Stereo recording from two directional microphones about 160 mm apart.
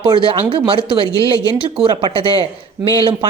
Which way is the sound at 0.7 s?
30° right (ahead or behind).